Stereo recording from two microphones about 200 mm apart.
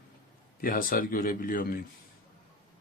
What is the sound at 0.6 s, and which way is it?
Speech, 45° left (ahead or behind).